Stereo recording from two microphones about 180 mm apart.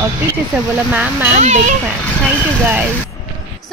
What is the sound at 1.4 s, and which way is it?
Speech, 40° right (ahead or behind).